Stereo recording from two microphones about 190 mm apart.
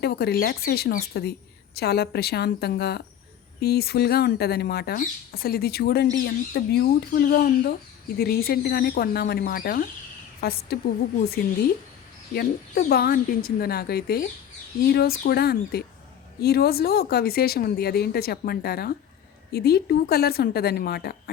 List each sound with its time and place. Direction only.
0.0 s a woman's voice: 55° left (ahead or behind)
12.3 s a woman's voice: 55° left (ahead or behind)